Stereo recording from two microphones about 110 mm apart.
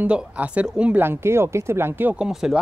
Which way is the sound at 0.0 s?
15° right (ahead or behind).